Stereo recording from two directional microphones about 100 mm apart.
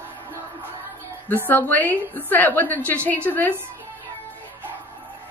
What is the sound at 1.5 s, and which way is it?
A woman's voice, 20° left (ahead or behind).